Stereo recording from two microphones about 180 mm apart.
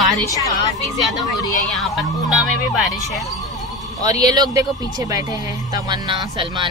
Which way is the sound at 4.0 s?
20° right (ahead or behind).